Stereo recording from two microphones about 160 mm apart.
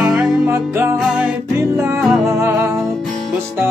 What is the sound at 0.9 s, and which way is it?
Music, 5° right (ahead or behind).